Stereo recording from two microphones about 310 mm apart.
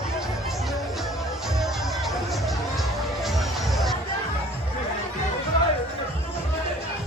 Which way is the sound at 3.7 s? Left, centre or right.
Centre.